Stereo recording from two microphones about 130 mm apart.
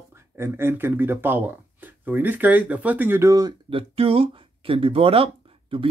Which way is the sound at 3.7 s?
45° right (ahead or behind).